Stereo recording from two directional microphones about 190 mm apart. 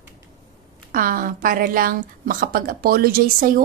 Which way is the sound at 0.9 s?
45° right (ahead or behind).